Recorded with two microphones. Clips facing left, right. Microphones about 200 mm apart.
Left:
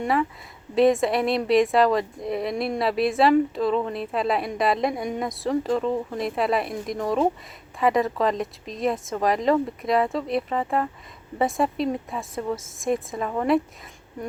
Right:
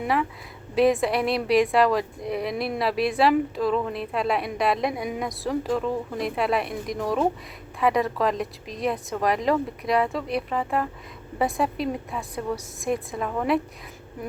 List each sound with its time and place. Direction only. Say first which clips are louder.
0.0 s a woman's voice: left 1 dB; centre (ahead or behind)